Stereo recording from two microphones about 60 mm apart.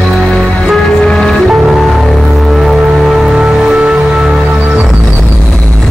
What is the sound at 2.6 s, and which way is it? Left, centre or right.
Music, centre.